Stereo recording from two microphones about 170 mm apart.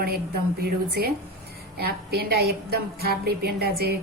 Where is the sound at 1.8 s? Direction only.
70° right (ahead or behind).